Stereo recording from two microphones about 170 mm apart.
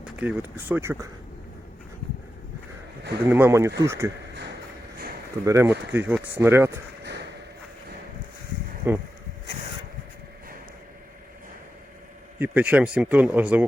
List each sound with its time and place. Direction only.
0.0 s a sound: 10° right (ahead or behind)
0.7 s speech: 15° right (ahead or behind)
3.2 s speech: 15° right (ahead or behind)
5.5 s speech: 15° right (ahead or behind)
8.9 s speech: 15° right (ahead or behind)
12.4 s speech: 10° right (ahead or behind)